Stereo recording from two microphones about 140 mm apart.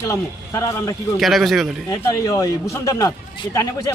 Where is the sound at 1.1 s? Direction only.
Centre (ahead or behind).